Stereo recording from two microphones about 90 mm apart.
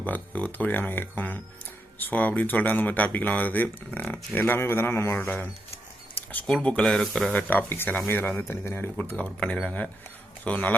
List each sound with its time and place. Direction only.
0.0 s speech: 15° left (ahead or behind)
6.5 s speech: 10° left (ahead or behind)
7.3 s speech: 20° left (ahead or behind)